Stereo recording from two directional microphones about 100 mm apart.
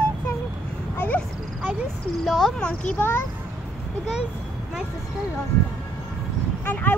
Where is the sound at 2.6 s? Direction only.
10° left (ahead or behind).